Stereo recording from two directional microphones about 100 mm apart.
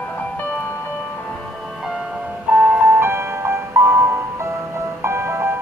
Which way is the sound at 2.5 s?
15° right (ahead or behind).